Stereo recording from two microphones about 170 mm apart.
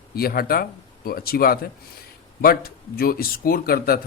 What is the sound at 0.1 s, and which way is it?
Speech, 60° left (ahead or behind).